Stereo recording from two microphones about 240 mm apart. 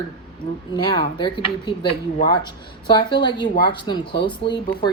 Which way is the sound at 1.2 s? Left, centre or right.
Centre.